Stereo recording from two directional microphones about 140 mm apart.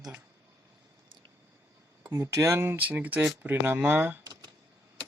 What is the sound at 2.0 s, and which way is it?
Speech, 20° right (ahead or behind).